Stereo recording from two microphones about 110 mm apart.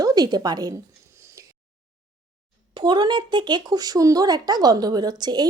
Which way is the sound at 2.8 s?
45° right (ahead or behind).